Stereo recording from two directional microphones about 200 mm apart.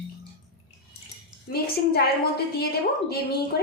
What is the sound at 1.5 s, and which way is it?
A woman's voice, 50° left (ahead or behind).